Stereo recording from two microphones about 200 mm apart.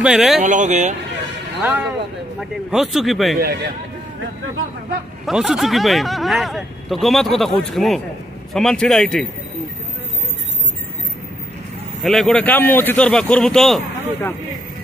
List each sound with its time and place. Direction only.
0.0 s speech: centre (ahead or behind)
0.5 s speech: 35° right (ahead or behind)
1.6 s speech: 10° right (ahead or behind)
5.2 s speech: centre (ahead or behind)
12.0 s speech: centre (ahead or behind)